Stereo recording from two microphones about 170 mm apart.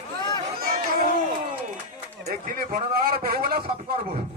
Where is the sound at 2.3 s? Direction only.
60° right (ahead or behind).